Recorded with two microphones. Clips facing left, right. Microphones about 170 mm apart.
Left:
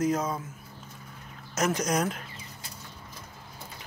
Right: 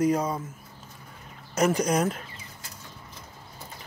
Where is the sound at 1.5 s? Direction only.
10° right (ahead or behind).